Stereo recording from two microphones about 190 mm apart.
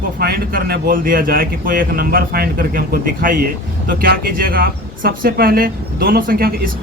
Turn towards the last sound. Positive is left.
turn(degrees=-50)  # may be behind; listen again after turning